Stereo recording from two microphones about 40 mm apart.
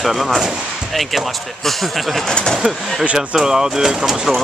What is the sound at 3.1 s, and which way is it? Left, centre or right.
Speech, centre.